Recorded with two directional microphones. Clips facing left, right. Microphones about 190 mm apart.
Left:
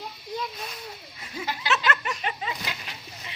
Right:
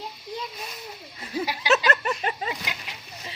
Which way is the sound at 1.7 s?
40° right (ahead or behind).